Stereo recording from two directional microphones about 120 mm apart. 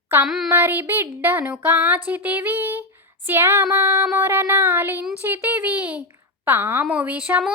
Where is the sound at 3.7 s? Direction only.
20° right (ahead or behind).